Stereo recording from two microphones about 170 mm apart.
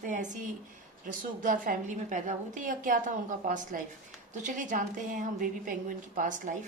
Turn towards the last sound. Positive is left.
turn(degrees=-50)  # may be behind; listen again after turning